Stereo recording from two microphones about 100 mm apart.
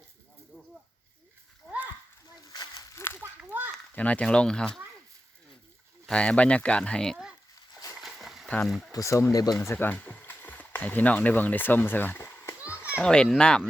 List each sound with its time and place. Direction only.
0.5 s snake: 10° left (ahead or behind)
2.4 s a sound: 35° left (ahead or behind)
3.2 s a sound: 20° right (ahead or behind)
3.9 s speech: 15° left (ahead or behind)
6.1 s speech: 10° left (ahead or behind)
7.9 s a sound: centre (ahead or behind)
8.6 s speech: 5° left (ahead or behind)
8.9 s speech: 30° left (ahead or behind)
9.6 s speech: 25° left (ahead or behind)
13.0 s speech: 10° left (ahead or behind)